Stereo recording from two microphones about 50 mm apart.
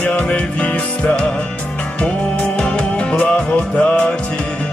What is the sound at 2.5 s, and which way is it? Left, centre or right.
Music, left.